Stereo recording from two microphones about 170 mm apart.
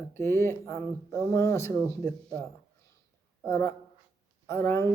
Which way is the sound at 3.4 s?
15° left (ahead or behind).